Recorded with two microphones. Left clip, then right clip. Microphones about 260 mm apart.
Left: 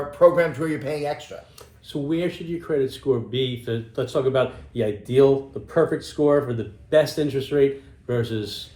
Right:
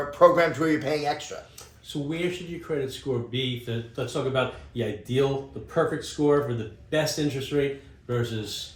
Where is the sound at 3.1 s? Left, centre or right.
Left.